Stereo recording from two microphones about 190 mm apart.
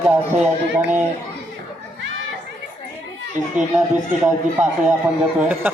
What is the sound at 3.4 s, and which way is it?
Speech, 45° right (ahead or behind).